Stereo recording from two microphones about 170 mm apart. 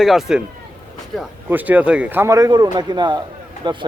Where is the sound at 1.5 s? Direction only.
10° right (ahead or behind); by 3.9 s 30° right (ahead or behind).